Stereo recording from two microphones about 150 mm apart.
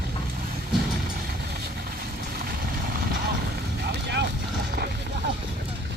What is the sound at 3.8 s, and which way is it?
Vehicle, 90° right.